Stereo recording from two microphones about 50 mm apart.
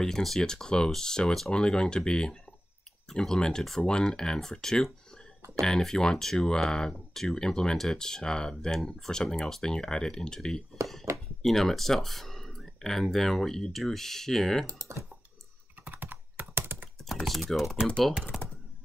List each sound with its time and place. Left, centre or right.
0.0 s speech: centre
14.7 s speech: right
15.8 s computer keyboard: right
17.3 s speech: centre